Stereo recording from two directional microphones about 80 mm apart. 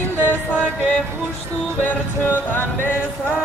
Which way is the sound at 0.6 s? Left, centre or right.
Centre.